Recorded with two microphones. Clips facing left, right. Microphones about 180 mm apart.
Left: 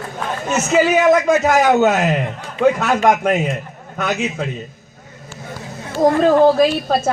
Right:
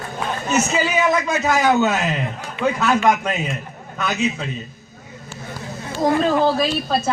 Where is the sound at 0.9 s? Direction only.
50° left (ahead or behind).